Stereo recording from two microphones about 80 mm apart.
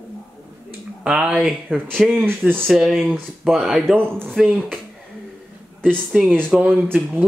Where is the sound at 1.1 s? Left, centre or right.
Centre.